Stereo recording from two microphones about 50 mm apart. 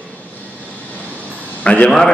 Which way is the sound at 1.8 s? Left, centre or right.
Centre.